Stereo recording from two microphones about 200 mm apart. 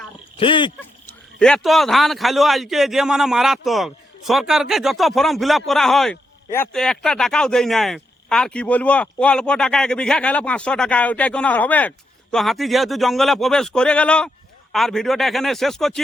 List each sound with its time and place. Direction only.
0.3 s speech: 25° left (ahead or behind)
1.4 s speech: 5° left (ahead or behind)